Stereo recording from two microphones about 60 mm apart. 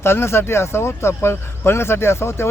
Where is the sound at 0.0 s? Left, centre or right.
Left.